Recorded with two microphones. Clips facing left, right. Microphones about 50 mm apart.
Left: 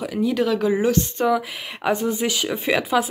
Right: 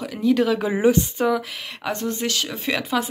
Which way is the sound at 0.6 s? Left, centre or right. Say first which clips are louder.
Right 1 dB; centre.